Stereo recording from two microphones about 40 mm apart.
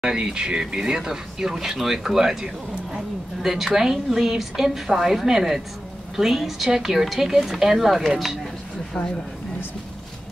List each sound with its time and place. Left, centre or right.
0.0 s speech: right; by 8.4 s centre